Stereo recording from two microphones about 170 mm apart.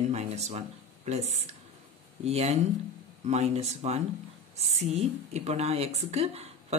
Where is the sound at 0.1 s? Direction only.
40° right (ahead or behind).